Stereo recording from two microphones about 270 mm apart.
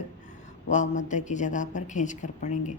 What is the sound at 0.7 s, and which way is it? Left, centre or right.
A woman's voice, left.